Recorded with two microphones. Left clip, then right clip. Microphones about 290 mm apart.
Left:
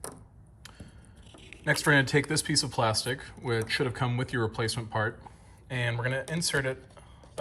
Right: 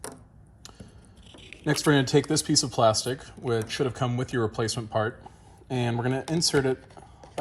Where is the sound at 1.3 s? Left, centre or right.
Centre.